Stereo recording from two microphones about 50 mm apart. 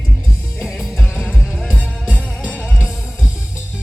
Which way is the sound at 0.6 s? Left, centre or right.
Centre.